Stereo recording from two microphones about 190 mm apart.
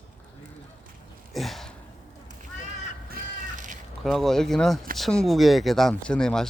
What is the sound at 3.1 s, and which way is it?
Crow, 45° right (ahead or behind).